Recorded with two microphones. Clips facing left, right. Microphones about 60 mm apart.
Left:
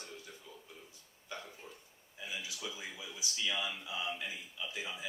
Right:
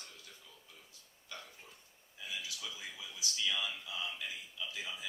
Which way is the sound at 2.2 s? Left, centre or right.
Left.